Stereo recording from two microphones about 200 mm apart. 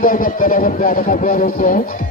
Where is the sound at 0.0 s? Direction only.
45° left (ahead or behind).